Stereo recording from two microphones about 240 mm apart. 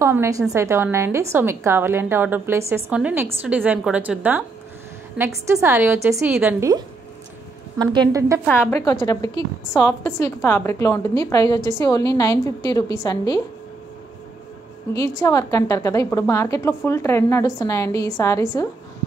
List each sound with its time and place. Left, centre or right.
0.0 s a woman's voice: centre
7.8 s a woman's voice: centre
8.5 s a woman's voice: centre
15.0 s a woman's voice: centre